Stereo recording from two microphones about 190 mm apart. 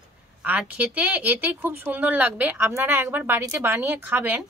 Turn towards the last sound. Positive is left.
turn(degrees=-10)  # may be behind; listen again after turning